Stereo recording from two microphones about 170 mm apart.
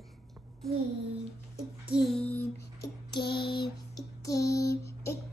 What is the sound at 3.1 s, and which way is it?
Female singing, 70° left (ahead or behind).